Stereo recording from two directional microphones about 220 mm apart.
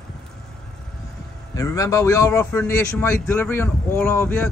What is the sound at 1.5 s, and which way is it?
Speech, 15° left (ahead or behind).